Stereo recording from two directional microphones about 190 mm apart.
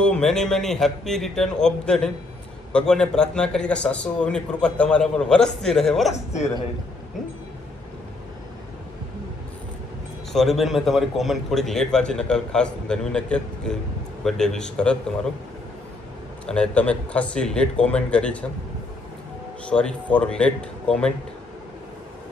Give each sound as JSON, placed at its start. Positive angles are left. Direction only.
{"t": 0.0, "sound": "a man's voice", "side_deg": 5}
{"t": 10.3, "sound": "a man's voice", "side_deg": 0}
{"t": 16.4, "sound": "a man's voice", "side_deg": 5}
{"t": 19.6, "sound": "a man's voice", "side_deg": 5}